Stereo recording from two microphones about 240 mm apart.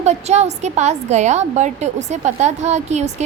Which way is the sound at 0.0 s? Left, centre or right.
Right.